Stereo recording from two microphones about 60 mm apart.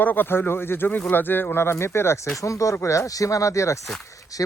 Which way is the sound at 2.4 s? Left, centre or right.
Left.